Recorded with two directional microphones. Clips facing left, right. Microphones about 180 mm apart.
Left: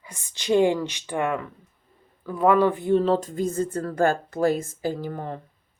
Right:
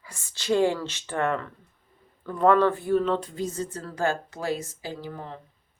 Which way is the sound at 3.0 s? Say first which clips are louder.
Left 4 dB; 35° left (ahead or behind).